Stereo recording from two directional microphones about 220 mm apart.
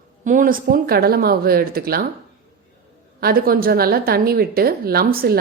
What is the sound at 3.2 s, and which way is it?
A woman's voice, 45° right (ahead or behind).